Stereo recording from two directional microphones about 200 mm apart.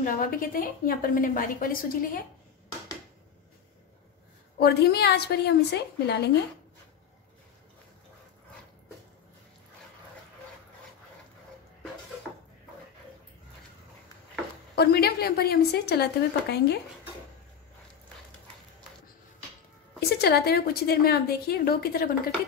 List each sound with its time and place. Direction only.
0.0 s a woman's voice: 45° left (ahead or behind)
4.6 s a woman's voice: 55° left (ahead or behind)
14.8 s a woman's voice: 55° left (ahead or behind)
20.0 s a woman's voice: 55° left (ahead or behind)